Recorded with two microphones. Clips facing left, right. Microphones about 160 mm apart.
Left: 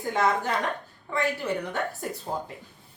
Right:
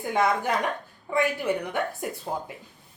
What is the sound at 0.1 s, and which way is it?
Speech, 15° right (ahead or behind).